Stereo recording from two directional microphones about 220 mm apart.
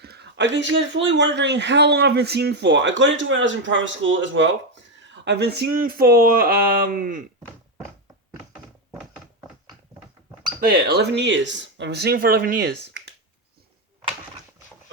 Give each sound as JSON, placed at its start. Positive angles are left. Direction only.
{"t": 0.0, "sound": "speech", "side_deg": -50}
{"t": 10.6, "sound": "speech", "side_deg": -45}